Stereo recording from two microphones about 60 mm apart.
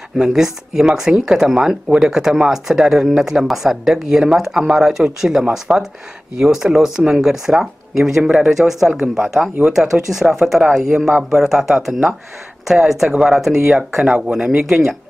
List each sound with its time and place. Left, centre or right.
0.2 s speech: centre
8.2 s speech: right
8.5 s speech: centre